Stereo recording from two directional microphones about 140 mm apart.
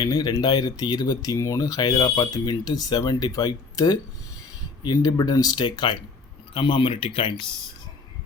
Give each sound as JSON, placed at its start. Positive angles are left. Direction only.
{"t": 0.0, "sound": "speech", "side_deg": 30}